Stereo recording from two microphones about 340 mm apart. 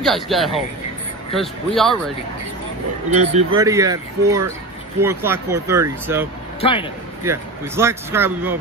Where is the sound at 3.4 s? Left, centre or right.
Centre.